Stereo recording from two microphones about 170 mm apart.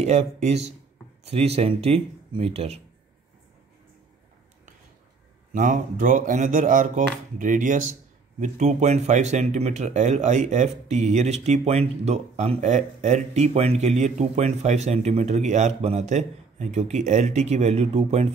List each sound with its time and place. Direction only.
0.0 s speech: 40° right (ahead or behind)
5.5 s speech: 50° right (ahead or behind)